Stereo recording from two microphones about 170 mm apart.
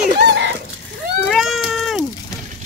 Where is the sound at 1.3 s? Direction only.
Centre (ahead or behind).